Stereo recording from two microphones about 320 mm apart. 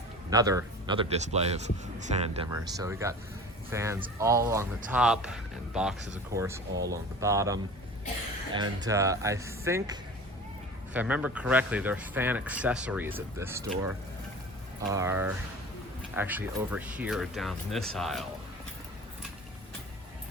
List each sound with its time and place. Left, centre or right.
0.3 s speech: centre